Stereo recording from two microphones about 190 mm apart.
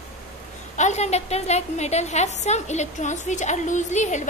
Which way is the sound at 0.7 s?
35° left (ahead or behind).